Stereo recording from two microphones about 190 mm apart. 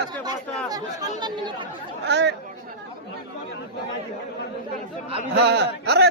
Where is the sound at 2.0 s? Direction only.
65° right (ahead or behind).